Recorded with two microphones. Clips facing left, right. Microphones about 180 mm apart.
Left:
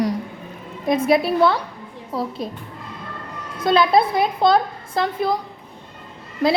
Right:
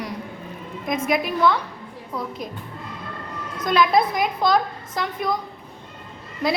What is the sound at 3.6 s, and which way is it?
A child's voice, 30° left (ahead or behind).